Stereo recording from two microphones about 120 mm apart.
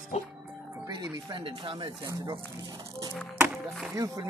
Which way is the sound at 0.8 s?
40° right (ahead or behind).